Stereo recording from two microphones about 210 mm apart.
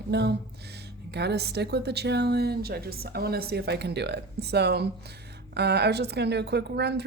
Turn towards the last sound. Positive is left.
turn(degrees=-50)  # may be behind; listen again after turning